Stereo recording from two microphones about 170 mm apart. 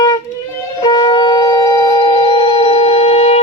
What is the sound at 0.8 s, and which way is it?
Shofar, 25° left (ahead or behind).